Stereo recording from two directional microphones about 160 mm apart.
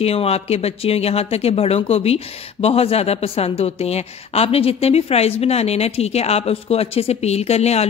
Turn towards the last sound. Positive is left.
turn(degrees=40)  # may be behind; listen again after turning